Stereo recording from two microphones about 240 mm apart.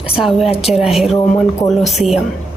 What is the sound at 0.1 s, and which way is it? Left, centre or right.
Speech, centre.